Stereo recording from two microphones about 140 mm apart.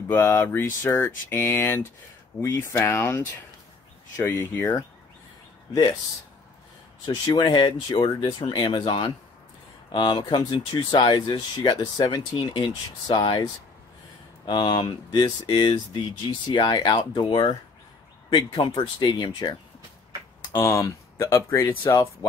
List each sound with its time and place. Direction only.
0.1 s a sound: 20° left (ahead or behind)
5.7 s speech: 30° left (ahead or behind)
7.1 s speech: 30° left (ahead or behind)
20.5 s speech: 20° left (ahead or behind)